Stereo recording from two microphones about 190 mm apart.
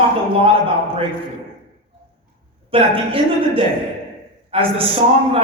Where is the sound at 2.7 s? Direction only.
30° right (ahead or behind).